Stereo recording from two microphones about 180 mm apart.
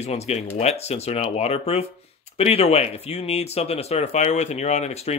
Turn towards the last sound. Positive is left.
turn(degrees=40)  # may be behind; listen again after turning